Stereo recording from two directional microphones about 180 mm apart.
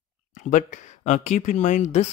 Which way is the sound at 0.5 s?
45° left (ahead or behind).